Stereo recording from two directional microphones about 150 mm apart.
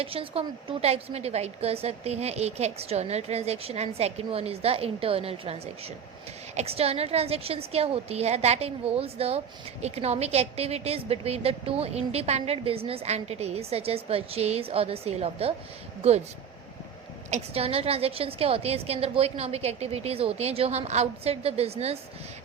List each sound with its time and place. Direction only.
0.0 s a woman's voice: 40° right (ahead or behind)
17.3 s a woman's voice: 40° right (ahead or behind)